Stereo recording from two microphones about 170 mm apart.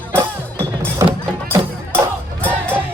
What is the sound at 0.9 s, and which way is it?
Music, 15° right (ahead or behind).